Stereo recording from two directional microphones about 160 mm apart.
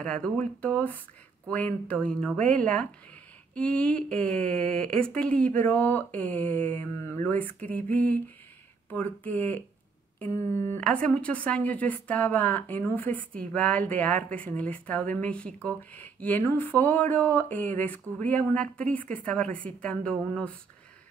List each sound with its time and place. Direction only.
0.0 s a woman's voice: 5° left (ahead or behind)